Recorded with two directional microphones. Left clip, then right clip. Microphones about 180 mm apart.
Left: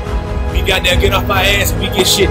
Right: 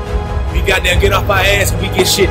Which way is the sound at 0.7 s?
15° right (ahead or behind).